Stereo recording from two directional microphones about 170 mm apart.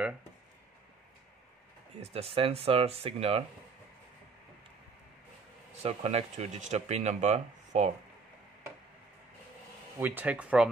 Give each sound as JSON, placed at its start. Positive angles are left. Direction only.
{"t": 2.0, "sound": "speech", "side_deg": -35}
{"t": 5.8, "sound": "speech", "side_deg": -40}
{"t": 9.9, "sound": "speech", "side_deg": -10}